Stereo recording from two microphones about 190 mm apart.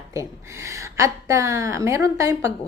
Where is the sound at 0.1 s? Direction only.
15° right (ahead or behind).